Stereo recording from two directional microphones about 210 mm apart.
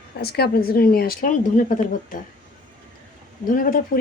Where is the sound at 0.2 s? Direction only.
50° left (ahead or behind).